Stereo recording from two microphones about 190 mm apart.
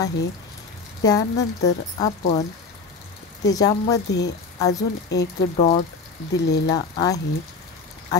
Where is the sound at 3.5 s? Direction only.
20° left (ahead or behind).